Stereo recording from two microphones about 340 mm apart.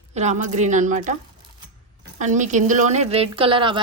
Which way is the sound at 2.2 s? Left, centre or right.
Right.